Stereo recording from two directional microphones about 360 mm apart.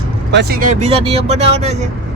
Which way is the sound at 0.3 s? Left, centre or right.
Right.